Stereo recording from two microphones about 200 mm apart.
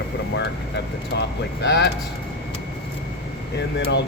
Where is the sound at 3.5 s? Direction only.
60° left (ahead or behind).